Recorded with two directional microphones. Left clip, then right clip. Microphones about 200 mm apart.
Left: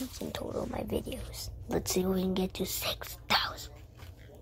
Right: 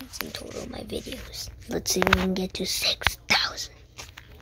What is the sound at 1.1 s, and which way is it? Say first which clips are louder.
Speech: right 5 dB; 15° right (ahead or behind).